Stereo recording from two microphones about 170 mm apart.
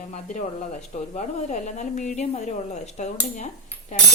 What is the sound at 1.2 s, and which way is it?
Speech, 45° left (ahead or behind).